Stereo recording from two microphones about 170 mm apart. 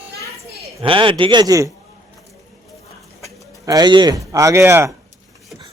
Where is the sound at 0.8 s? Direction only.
30° right (ahead or behind).